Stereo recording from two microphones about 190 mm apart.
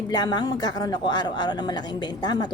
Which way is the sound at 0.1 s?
20° left (ahead or behind).